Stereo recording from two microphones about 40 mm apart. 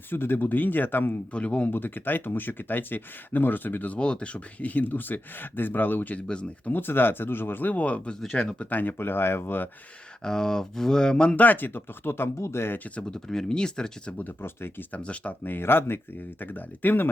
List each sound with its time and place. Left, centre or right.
0.1 s speech: left
1.3 s speech: left
1.7 s speech: left
3.8 s speech: left
7.7 s speech: left
8.7 s speech: left
10.2 s speech: centre
11.3 s speech: left
13.1 s speech: centre
14.4 s speech: left
14.9 s speech: left
15.4 s speech: left
16.4 s speech: left